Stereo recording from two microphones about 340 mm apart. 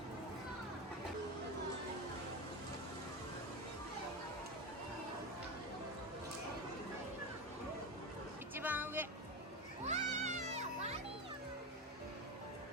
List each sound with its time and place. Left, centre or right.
8.5 s music: centre
9.8 s music: centre